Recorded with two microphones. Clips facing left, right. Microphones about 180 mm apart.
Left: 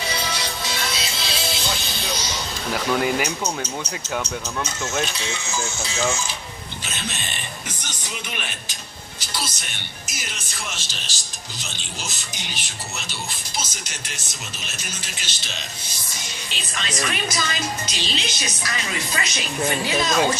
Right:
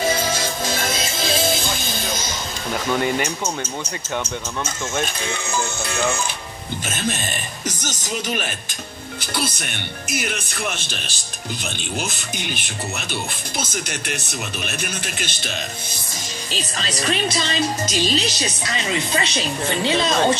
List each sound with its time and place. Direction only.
0.0 s music: 45° right (ahead or behind)
2.7 s speech: 5° left (ahead or behind)
5.0 s speech: 55° right (ahead or behind)
6.9 s speech: 45° right (ahead or behind)
9.2 s speech: 55° right (ahead or behind)
16.5 s speech: 35° right (ahead or behind)
17.8 s a woman's voice: 45° right (ahead or behind); by 20.2 s 25° right (ahead or behind)